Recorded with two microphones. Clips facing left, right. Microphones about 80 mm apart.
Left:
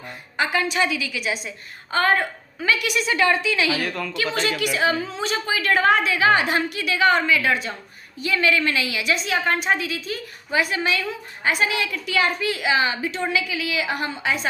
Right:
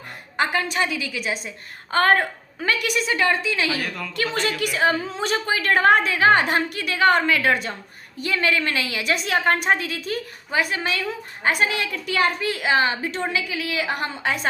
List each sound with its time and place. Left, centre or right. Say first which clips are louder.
0.3 s a woman's voice: left 1 dB; right
4.2 s a woman's voice: even; right